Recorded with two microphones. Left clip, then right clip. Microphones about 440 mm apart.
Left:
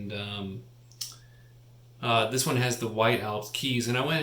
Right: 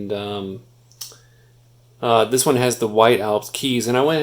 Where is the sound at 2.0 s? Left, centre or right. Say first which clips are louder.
Right 10 dB; centre.